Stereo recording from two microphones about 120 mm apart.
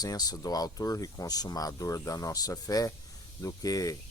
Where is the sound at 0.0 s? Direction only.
30° left (ahead or behind).